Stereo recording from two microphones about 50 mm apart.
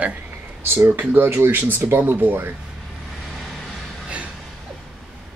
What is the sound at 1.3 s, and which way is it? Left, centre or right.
Speech, right.